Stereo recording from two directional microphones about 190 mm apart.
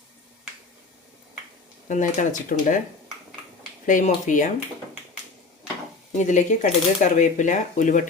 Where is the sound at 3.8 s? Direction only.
40° left (ahead or behind).